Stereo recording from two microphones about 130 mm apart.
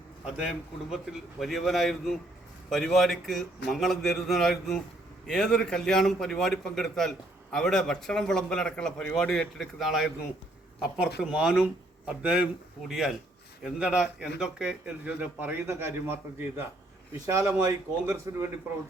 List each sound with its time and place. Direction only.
0.3 s a man's voice: 5° right (ahead or behind)
17.2 s speech: 25° right (ahead or behind)